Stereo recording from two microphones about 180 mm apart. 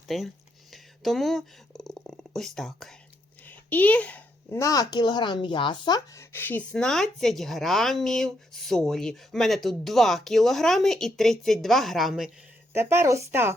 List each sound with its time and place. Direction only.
0.1 s speech: centre (ahead or behind)
0.7 s a sound: centre (ahead or behind)
3.4 s a woman's voice: 10° left (ahead or behind)
12.7 s a woman's voice: 15° right (ahead or behind)